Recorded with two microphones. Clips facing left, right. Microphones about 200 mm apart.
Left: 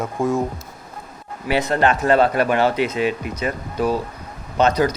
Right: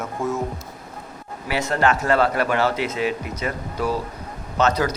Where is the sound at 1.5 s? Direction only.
20° left (ahead or behind).